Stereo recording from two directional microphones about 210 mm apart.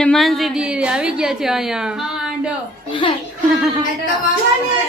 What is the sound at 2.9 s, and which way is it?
Speech, 25° left (ahead or behind).